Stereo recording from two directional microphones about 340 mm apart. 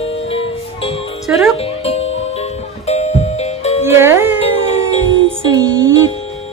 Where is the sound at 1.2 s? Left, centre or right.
Centre.